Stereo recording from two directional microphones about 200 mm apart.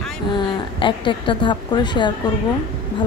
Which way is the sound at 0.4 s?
25° left (ahead or behind).